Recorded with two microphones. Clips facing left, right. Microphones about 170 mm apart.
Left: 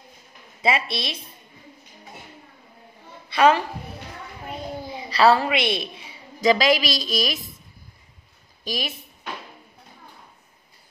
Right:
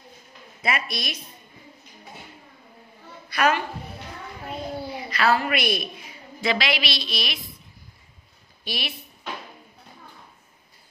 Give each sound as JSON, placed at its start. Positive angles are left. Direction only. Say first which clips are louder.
{"t": 0.6, "sound": "a woman's voice", "louder": "left 4 dB", "side_deg": 25}
{"t": 3.3, "sound": "a woman's voice", "louder": "left 5 dB", "side_deg": 30}
{"t": 5.1, "sound": "a woman's voice", "louder": "left 5 dB", "side_deg": 30}
{"t": 6.4, "sound": "a woman's voice", "louder": "left 7 dB", "side_deg": 40}
{"t": 8.6, "sound": "speech", "louder": "left 3 dB", "side_deg": 40}